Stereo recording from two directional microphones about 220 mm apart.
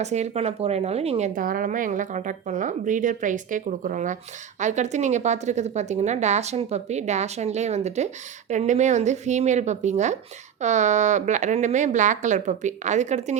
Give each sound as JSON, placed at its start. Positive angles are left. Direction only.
{"t": 0.0, "sound": "a woman's voice", "side_deg": -30}